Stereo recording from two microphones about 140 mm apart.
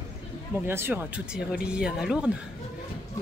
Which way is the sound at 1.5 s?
5° right (ahead or behind).